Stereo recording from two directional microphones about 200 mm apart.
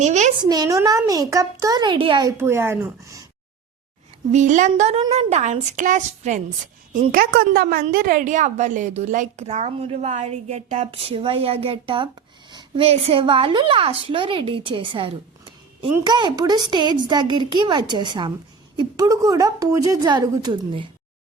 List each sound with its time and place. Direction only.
0.0 s a woman's voice: 35° right (ahead or behind)
0.3 s a child's voice: 20° right (ahead or behind)
4.3 s a woman's voice: 35° right (ahead or behind); by 20.8 s 20° right (ahead or behind)